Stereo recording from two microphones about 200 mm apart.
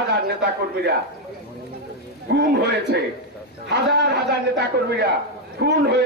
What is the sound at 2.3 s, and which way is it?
A man's voice, 55° right (ahead or behind).